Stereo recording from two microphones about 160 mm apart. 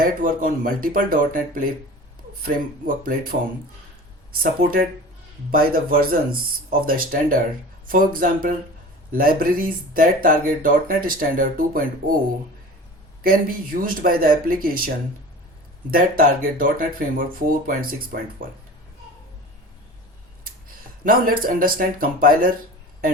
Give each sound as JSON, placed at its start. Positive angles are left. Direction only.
{"t": 0.0, "sound": "speech", "side_deg": -60}
{"t": 4.3, "sound": "speech", "side_deg": -65}
{"t": 13.8, "sound": "speech", "side_deg": -65}
{"t": 21.0, "sound": "speech", "side_deg": -60}